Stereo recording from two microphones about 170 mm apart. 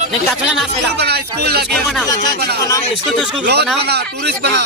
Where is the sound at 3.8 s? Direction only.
75° right (ahead or behind).